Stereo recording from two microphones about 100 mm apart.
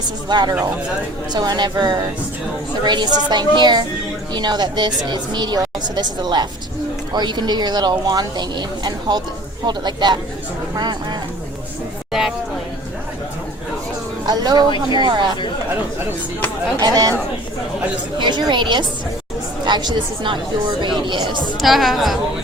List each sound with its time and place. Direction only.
0.3 s speech: 45° right (ahead or behind)
14.3 s speech: 45° right (ahead or behind)
16.8 s speech: 40° right (ahead or behind)
18.2 s speech: 50° right (ahead or behind)
21.6 s speech: centre (ahead or behind)